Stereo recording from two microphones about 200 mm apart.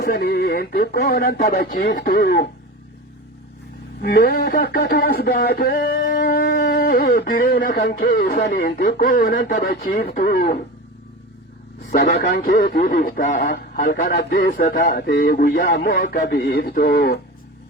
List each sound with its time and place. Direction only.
0.0 s speech: 50° left (ahead or behind)
4.0 s speech: 50° left (ahead or behind)
10.1 s speech: 50° left (ahead or behind)
11.9 s speech: 45° left (ahead or behind)
13.5 s speech: 50° left (ahead or behind)